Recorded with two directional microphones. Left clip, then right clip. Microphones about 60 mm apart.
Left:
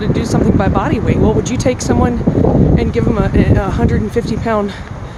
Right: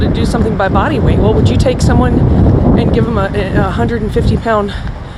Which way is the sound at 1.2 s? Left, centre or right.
Left.